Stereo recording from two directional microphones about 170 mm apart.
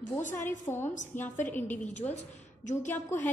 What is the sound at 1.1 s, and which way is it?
Speech, 50° left (ahead or behind).